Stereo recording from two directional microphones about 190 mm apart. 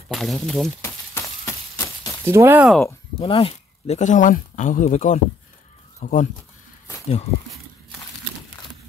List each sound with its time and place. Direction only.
0.1 s speech: centre (ahead or behind)
0.8 s a sound: 15° left (ahead or behind)
2.2 s speech: 10° right (ahead or behind)
3.2 s speech: 30° left (ahead or behind)